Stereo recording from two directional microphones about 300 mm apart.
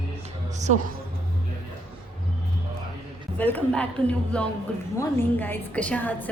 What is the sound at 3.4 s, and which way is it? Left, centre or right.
A woman's voice, centre.